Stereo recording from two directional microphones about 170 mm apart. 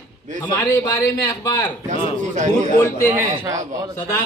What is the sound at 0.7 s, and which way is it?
Speech, 20° left (ahead or behind).